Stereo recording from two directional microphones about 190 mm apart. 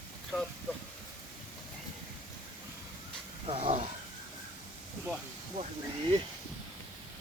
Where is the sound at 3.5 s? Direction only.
30° right (ahead or behind).